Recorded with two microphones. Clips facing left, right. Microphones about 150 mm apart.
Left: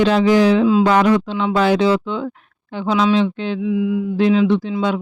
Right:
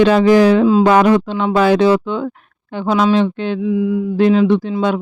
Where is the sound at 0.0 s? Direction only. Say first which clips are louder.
Right 3 dB; 55° right (ahead or behind).